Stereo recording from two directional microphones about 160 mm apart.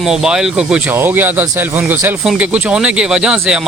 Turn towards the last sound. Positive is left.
turn(degrees=-5)  # may be behind; listen again after turning